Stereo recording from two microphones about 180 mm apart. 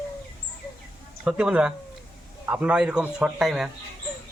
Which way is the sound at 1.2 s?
5° right (ahead or behind).